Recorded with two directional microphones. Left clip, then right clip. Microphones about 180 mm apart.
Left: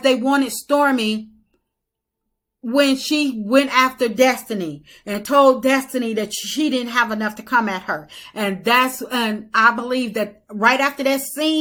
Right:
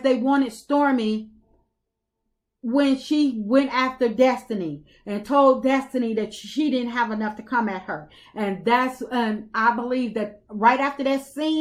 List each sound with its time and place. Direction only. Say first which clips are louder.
0.0 s speech: left 4 dB; 15° left (ahead or behind)
2.6 s a woman's voice: left 4 dB; 15° left (ahead or behind)